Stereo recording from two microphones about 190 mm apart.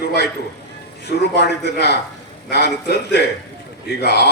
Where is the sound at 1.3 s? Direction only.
60° left (ahead or behind).